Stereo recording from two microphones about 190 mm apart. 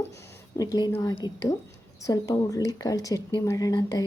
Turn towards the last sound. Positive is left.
turn(degrees=20)  # may be behind; listen again after turning